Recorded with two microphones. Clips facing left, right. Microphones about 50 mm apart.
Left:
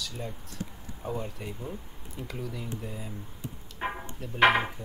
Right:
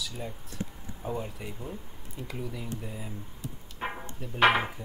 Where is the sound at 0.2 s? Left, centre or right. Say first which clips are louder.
Even; centre.